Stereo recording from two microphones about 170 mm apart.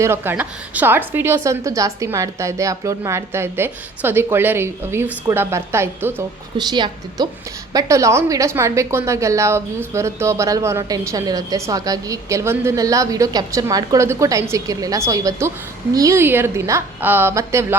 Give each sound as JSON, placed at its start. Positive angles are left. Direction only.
{"t": 0.0, "sound": "a woman's voice", "side_deg": -15}
{"t": 6.6, "sound": "a woman's voice", "side_deg": -25}